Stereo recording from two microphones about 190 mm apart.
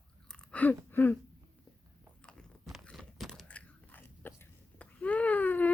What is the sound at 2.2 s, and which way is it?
Biting, 5° left (ahead or behind).